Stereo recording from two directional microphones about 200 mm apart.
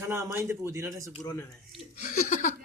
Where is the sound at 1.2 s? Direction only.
20° left (ahead or behind).